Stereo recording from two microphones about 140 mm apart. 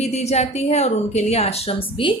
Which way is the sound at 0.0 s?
50° left (ahead or behind).